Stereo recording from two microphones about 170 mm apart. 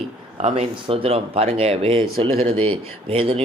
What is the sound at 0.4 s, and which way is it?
Speech, 35° right (ahead or behind).